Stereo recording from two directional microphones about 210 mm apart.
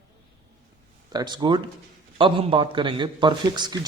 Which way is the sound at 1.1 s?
20° right (ahead or behind).